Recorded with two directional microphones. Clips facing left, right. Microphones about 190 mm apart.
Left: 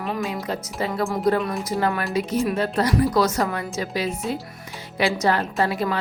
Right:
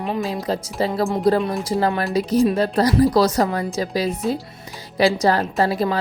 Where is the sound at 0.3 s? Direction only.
35° right (ahead or behind).